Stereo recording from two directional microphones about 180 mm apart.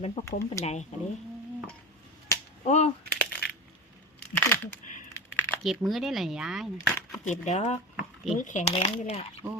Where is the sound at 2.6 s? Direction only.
40° left (ahead or behind).